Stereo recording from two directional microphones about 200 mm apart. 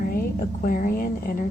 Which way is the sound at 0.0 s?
45° left (ahead or behind).